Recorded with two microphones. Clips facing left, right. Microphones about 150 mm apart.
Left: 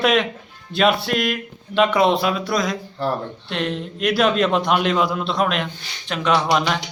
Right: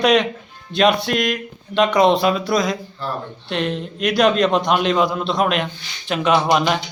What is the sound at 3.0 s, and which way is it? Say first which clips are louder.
Speech: left 6 dB; 65° left (ahead or behind).